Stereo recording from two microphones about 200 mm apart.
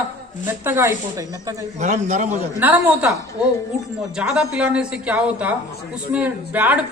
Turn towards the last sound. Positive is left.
turn(degrees=-10)  # may be behind; listen again after turning